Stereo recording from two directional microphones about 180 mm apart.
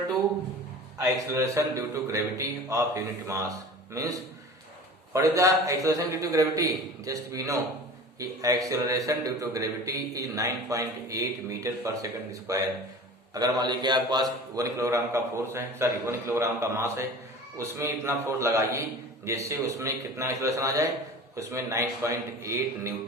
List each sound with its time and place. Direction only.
0.9 s a man's voice: 15° right (ahead or behind)